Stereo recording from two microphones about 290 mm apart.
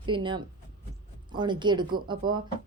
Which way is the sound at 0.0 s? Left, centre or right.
Centre.